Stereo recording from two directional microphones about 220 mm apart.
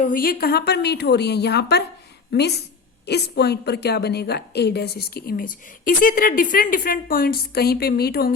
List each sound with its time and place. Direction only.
0.0 s a woman's voice: 40° left (ahead or behind)